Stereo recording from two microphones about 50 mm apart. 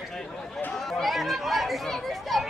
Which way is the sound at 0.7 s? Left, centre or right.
Centre.